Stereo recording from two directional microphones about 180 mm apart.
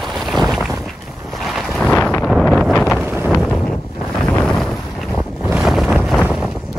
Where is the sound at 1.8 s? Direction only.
10° left (ahead or behind).